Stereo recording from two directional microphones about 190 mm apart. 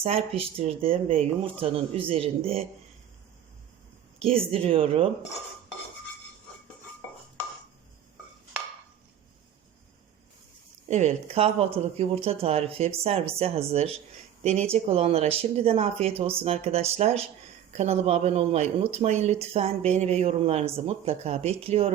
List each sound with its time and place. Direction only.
0.0 s speech: 30° right (ahead or behind)
4.2 s speech: 30° right (ahead or behind)
10.8 s speech: 35° right (ahead or behind)